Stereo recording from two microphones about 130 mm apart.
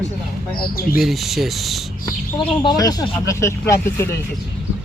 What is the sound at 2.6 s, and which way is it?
Speech, 30° left (ahead or behind).